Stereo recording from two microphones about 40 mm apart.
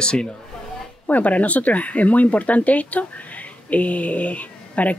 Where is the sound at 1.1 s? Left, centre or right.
Left.